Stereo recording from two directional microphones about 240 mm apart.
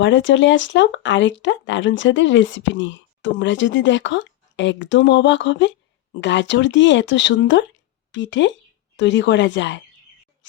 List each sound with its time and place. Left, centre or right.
0.0 s speech: left